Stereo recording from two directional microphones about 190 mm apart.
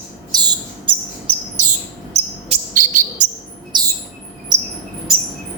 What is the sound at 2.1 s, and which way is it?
Bird vocalization, 40° right (ahead or behind).